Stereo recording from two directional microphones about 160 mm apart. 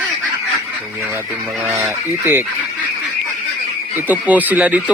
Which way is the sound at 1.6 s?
15° right (ahead or behind).